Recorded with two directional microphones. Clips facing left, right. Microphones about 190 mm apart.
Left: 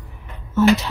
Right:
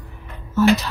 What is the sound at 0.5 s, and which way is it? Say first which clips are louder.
Speech: left 1 dB; 25° left (ahead or behind).